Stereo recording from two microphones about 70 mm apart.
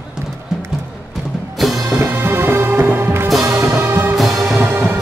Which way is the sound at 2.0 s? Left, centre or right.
Right.